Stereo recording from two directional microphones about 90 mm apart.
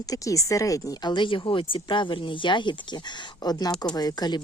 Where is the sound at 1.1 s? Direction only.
65° left (ahead or behind).